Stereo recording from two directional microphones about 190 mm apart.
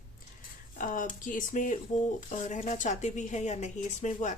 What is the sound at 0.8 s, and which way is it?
A woman's voice, 45° left (ahead or behind).